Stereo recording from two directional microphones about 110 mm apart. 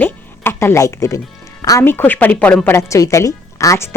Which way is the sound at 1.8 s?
20° left (ahead or behind).